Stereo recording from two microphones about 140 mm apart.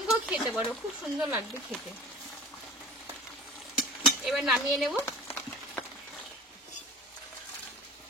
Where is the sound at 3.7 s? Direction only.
Centre (ahead or behind).